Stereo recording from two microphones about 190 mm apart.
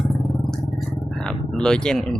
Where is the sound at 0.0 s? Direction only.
Centre (ahead or behind).